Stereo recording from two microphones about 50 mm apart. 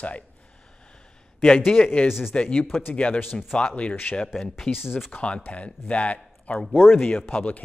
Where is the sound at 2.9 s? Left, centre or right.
Left.